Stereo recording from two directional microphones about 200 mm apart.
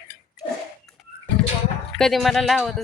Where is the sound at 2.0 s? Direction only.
Centre (ahead or behind).